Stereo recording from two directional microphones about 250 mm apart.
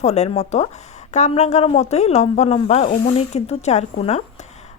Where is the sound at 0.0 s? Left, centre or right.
Left.